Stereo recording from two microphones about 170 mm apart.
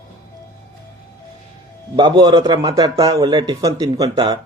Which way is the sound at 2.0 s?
25° right (ahead or behind).